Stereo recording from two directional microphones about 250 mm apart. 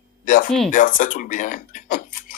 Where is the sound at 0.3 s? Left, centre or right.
Left.